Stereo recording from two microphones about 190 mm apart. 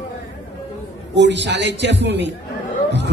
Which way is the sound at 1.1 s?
65° right (ahead or behind).